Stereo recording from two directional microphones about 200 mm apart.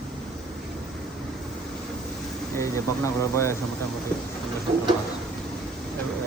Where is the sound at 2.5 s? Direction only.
15° left (ahead or behind).